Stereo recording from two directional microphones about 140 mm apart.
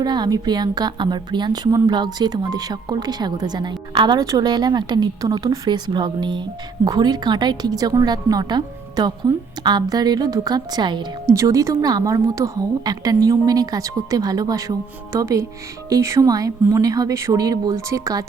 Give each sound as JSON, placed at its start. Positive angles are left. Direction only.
{"t": 0.0, "sound": "a woman's voice", "side_deg": -30}